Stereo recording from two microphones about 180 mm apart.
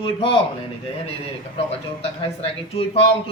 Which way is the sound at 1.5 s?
35° left (ahead or behind).